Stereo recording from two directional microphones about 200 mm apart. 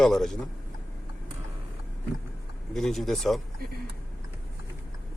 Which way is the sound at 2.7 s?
Centre (ahead or behind).